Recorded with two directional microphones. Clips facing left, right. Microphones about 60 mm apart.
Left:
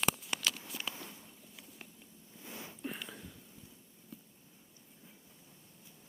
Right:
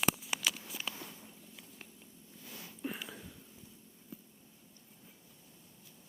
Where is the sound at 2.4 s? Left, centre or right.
Left.